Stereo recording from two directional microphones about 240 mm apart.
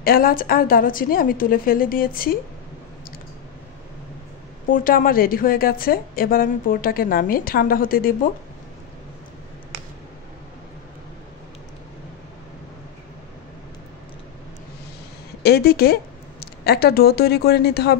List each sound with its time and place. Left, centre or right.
0.0 s a woman's voice: left
4.6 s a woman's voice: left
15.4 s speech: left